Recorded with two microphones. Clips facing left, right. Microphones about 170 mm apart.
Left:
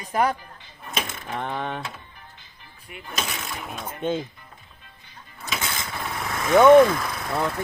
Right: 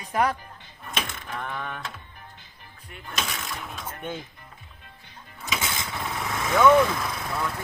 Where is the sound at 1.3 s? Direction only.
30° left (ahead or behind).